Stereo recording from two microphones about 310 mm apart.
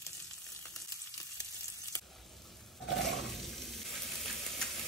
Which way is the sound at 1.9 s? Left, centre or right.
Centre.